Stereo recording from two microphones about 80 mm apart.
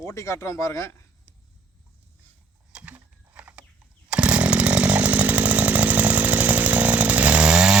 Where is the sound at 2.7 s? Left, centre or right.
Centre.